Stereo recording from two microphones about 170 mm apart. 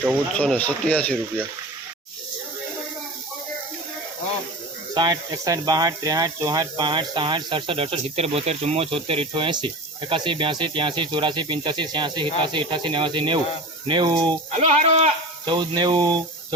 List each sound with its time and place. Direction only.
0.3 s speech: 10° left (ahead or behind)
4.9 s speech: 25° right (ahead or behind)
14.5 s speech: 40° right (ahead or behind)
15.4 s speech: 25° right (ahead or behind)